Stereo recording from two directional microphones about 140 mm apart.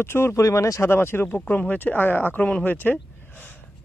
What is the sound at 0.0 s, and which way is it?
Speech, 15° left (ahead or behind).